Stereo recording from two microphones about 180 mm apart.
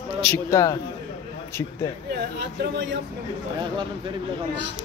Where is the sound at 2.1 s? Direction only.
70° right (ahead or behind).